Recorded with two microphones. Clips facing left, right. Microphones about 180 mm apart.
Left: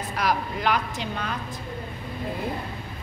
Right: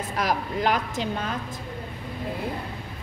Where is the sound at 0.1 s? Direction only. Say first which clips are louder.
Left 1 dB; 45° right (ahead or behind).